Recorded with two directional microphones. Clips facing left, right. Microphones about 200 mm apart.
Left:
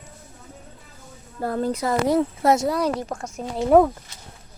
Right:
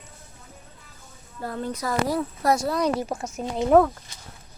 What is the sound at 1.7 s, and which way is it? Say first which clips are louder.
Speech: left 4 dB; 25° left (ahead or behind).